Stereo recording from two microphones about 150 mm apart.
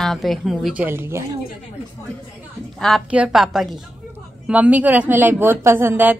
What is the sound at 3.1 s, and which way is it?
A woman's voice, 5° right (ahead or behind).